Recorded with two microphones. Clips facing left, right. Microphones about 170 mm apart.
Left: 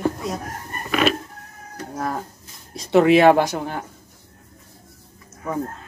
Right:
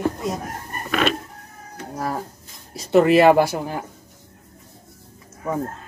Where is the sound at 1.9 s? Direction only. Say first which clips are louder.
Even; 5° right (ahead or behind).